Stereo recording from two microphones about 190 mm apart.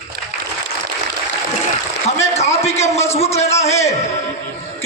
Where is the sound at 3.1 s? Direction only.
35° left (ahead or behind).